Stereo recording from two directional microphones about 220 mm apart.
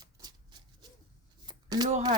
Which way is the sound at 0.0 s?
20° right (ahead or behind).